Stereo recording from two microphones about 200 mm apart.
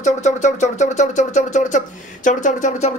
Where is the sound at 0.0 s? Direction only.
35° left (ahead or behind).